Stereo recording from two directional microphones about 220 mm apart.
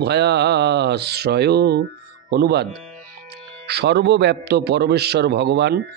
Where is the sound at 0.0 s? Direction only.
50° right (ahead or behind).